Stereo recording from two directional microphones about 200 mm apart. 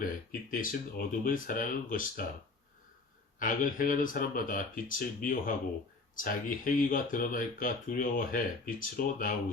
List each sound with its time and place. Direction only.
0.0 s speech: 45° left (ahead or behind)
3.3 s speech: 40° left (ahead or behind)